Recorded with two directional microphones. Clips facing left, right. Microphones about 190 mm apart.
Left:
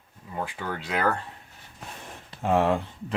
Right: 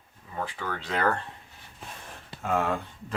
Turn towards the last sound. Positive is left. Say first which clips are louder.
# left 5 dB
turn(degrees=25)  # may be behind; listen again after turning